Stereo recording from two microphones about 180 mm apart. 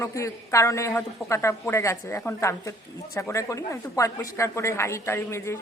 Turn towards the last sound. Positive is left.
turn(degrees=15)  # may be behind; listen again after turning